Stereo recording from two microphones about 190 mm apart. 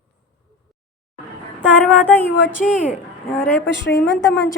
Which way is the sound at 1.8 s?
10° left (ahead or behind).